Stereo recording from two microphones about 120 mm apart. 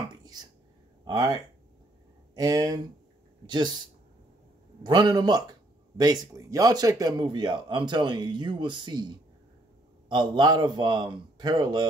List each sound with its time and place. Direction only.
0.1 s a sound: 35° right (ahead or behind)
1.0 s speech: 35° right (ahead or behind)
4.8 s speech: 40° right (ahead or behind)